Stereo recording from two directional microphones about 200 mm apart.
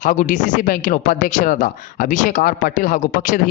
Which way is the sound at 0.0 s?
40° left (ahead or behind).